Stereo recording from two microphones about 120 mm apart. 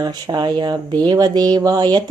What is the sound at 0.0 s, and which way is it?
Speech, 35° right (ahead or behind).